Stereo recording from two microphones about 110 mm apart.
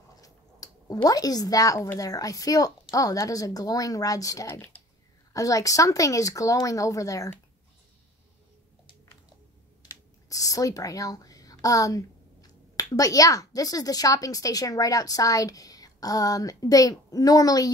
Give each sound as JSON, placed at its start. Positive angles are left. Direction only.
{"t": 0.2, "sound": "a sound", "side_deg": 35}
{"t": 2.0, "sound": "speech", "side_deg": 30}
{"t": 9.8, "sound": "speech", "side_deg": 30}